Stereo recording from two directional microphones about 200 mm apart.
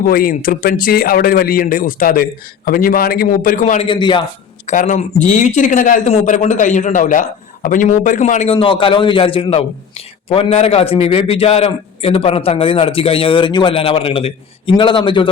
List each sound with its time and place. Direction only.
0.0 s a man's voice: 45° left (ahead or behind); by 4.2 s 25° left (ahead or behind)
4.6 s a man's voice: 40° left (ahead or behind)